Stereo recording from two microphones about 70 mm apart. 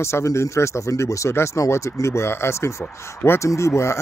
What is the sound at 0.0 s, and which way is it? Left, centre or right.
Speech, left.